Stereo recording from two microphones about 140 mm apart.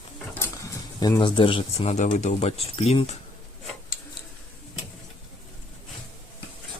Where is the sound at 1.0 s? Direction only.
30° left (ahead or behind); by 3.1 s 45° left (ahead or behind).